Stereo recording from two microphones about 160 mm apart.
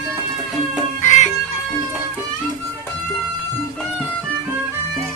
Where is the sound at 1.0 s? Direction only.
50° left (ahead or behind).